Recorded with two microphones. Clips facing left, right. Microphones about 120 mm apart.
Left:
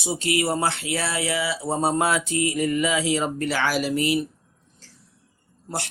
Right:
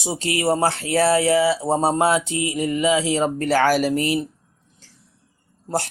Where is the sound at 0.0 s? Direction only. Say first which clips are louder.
Right 2 dB; 30° right (ahead or behind).